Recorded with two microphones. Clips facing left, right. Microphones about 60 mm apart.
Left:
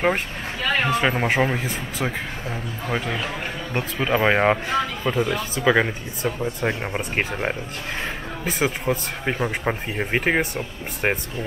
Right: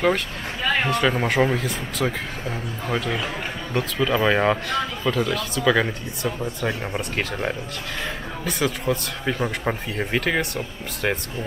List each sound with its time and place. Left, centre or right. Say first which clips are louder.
0.8 s a man's voice: left 1 dB; centre
3.7 s speech: right 1 dB; left
9.4 s speech: left 1 dB; centre
10.1 s speech: left 2 dB; left